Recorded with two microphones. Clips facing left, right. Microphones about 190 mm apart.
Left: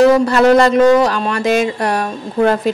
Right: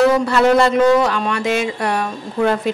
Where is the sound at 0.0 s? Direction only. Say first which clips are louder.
Left 4 dB; 40° left (ahead or behind).